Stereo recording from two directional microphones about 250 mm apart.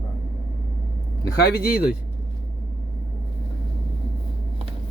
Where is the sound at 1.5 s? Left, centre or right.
Left.